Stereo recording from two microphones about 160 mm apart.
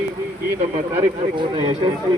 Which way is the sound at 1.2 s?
35° right (ahead or behind).